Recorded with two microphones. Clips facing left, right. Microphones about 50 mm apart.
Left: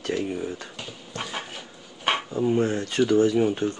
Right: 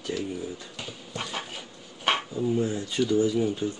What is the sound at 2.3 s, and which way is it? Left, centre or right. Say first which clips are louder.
Speech: left 4 dB; left.